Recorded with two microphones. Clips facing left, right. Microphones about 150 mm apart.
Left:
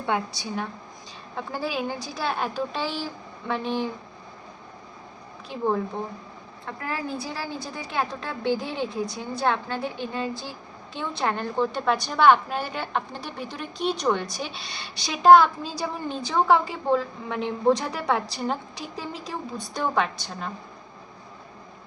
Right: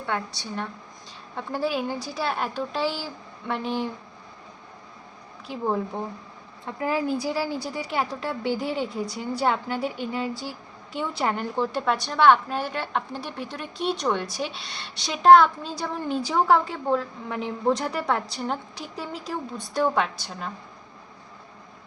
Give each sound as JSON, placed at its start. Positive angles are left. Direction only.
{"t": 0.0, "sound": "a woman's voice", "side_deg": 15}
{"t": 1.4, "sound": "a woman's voice", "side_deg": 0}
{"t": 5.5, "sound": "a woman's voice", "side_deg": -5}